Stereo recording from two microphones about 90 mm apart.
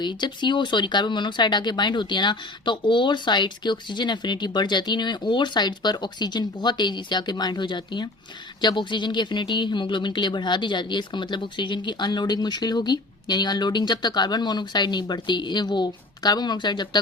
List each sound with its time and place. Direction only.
0.0 s speech: 60° left (ahead or behind)